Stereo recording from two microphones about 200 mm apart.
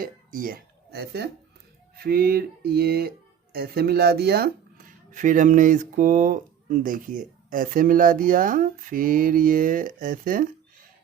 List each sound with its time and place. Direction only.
0.0 s speech: 45° right (ahead or behind)